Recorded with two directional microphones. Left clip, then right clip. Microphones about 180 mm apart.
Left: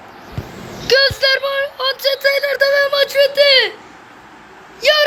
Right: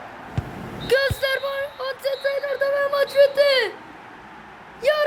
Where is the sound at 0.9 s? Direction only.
Centre (ahead or behind).